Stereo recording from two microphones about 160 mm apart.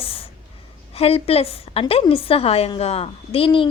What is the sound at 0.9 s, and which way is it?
A woman's voice, 40° left (ahead or behind).